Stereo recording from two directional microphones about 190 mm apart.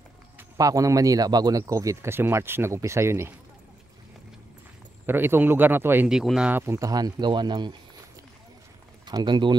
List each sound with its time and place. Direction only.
0.4 s speech: 20° right (ahead or behind)
5.0 s speech: 10° right (ahead or behind)
9.0 s speech: 25° right (ahead or behind)